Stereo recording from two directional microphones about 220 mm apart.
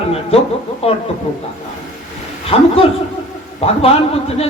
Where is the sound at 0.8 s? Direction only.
25° left (ahead or behind).